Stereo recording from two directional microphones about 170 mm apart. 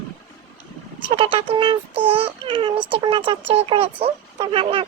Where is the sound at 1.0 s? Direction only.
30° right (ahead or behind).